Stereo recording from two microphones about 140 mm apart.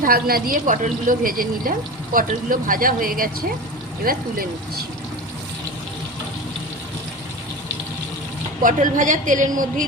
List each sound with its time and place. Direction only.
0.0 s a woman's voice: 90° right
8.6 s a woman's voice: 65° right (ahead or behind)